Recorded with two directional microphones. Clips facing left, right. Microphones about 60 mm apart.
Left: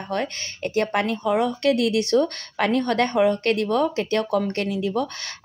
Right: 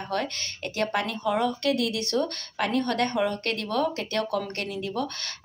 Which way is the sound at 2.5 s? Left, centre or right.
Left.